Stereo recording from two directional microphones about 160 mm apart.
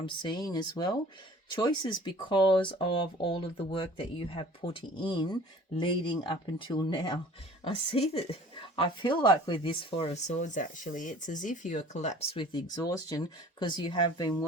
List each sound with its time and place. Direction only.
0.0 s speech: 30° left (ahead or behind); by 12.4 s 45° left (ahead or behind)
12.4 s speech: 30° left (ahead or behind)